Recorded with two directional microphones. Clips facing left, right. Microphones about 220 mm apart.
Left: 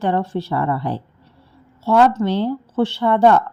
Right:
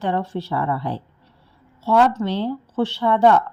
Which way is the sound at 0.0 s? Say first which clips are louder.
Left 3 dB; 45° left (ahead or behind).